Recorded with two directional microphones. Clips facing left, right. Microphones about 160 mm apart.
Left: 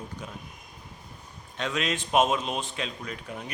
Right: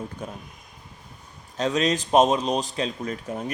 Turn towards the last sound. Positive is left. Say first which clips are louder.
# right 7 dB
turn(degrees=-40)  # may be behind; listen again after turning